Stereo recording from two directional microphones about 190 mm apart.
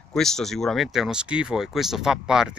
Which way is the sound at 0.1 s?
Centre (ahead or behind).